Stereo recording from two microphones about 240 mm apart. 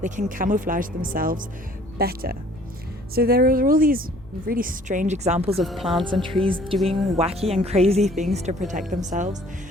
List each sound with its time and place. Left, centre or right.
0.0 s a woman's voice: right
5.5 s a woman's voice: centre
6.4 s a woman's voice: right